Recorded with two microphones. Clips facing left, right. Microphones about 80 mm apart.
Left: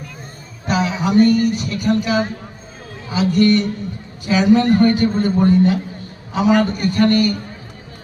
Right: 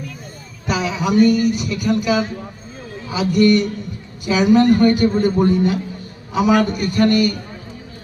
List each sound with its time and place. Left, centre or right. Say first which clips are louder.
0.7 s speech: left 1 dB; left